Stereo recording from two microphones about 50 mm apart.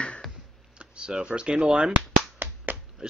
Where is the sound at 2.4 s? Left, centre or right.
Right.